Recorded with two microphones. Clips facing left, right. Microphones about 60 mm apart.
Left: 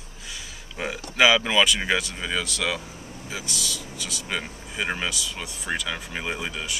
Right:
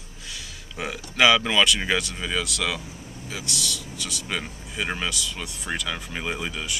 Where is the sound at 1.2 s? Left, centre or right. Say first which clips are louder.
Even; centre.